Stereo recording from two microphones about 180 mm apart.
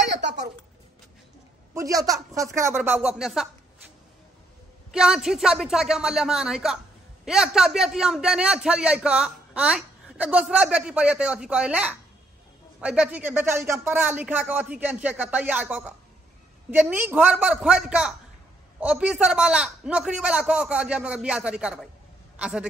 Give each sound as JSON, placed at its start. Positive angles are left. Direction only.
{"t": 0.2, "sound": "a sound", "side_deg": -70}
{"t": 1.7, "sound": "speech", "side_deg": -20}
{"t": 4.9, "sound": "a man's voice", "side_deg": -5}